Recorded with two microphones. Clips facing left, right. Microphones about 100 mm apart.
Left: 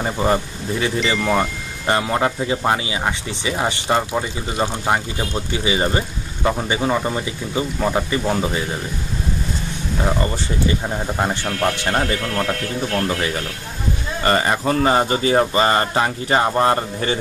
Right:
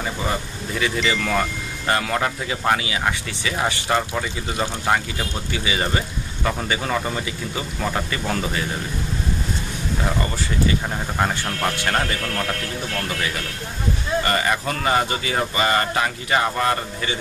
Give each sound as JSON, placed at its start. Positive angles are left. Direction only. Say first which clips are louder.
{"t": 0.0, "sound": "speech", "louder": "left 6 dB", "side_deg": 40}
{"t": 11.8, "sound": "speech", "louder": "left 2 dB", "side_deg": 20}